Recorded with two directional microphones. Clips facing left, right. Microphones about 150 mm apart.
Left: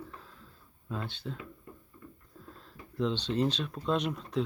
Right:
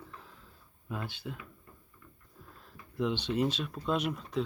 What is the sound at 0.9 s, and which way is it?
Speech, 10° right (ahead or behind).